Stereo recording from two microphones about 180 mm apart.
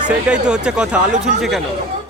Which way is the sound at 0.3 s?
5° right (ahead or behind).